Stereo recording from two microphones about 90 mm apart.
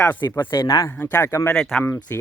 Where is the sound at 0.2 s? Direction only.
50° left (ahead or behind).